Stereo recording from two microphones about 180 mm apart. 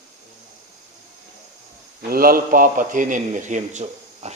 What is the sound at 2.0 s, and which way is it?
A man's voice, 55° right (ahead or behind).